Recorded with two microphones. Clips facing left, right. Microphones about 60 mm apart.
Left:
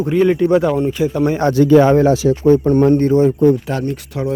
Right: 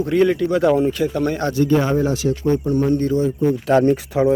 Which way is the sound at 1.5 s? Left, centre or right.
Left.